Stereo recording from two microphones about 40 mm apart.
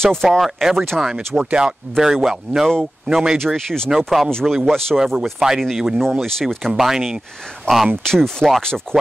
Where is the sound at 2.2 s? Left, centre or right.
Centre.